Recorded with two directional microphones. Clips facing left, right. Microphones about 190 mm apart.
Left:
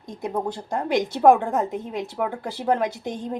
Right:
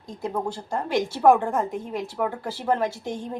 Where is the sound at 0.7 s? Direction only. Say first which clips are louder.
Left 2 dB; 20° left (ahead or behind).